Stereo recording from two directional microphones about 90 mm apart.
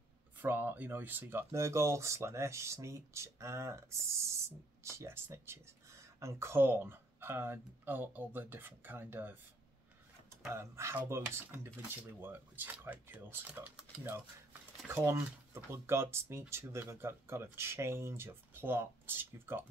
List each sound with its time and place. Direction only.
0.4 s speech: 20° right (ahead or behind)
10.5 s speech: 30° right (ahead or behind)
14.9 s speech: 30° right (ahead or behind)